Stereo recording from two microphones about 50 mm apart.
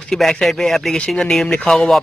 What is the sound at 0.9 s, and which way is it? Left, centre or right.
A man's voice, centre.